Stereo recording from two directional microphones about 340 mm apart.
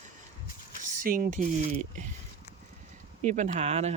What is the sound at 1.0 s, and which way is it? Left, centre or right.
Speech, right.